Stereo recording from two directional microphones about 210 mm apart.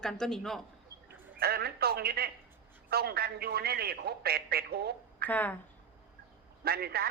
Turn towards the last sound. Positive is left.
turn(degrees=-45)  # may be behind; listen again after turning